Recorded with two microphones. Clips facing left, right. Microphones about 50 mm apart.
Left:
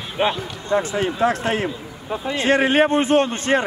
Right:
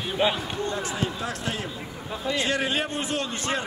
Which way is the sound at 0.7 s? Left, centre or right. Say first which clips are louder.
Left 12 dB; left.